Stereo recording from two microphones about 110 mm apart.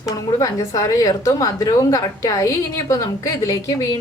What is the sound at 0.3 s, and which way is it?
A woman's voice, 30° left (ahead or behind).